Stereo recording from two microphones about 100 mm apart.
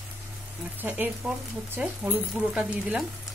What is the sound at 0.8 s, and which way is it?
Speech, 20° right (ahead or behind).